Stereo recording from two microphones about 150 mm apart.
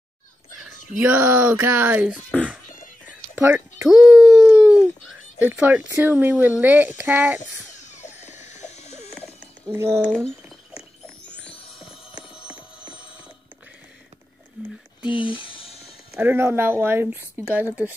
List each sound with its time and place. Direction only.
0.7 s speech: 10° right (ahead or behind)
3.9 s speech: 5° right (ahead or behind)
7.8 s a sound: 50° left (ahead or behind)
10.0 s a sound: 5° left (ahead or behind)
11.9 s clip-clop: 5° right (ahead or behind)
14.6 s speech: 10° right (ahead or behind)
15.0 s speech: 35° left (ahead or behind)
16.2 s speech: 15° right (ahead or behind)